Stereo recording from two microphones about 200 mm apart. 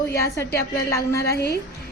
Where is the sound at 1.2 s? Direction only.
50° left (ahead or behind).